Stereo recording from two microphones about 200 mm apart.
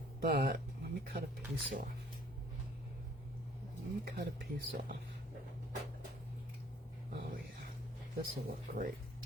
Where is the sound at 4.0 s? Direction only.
55° right (ahead or behind).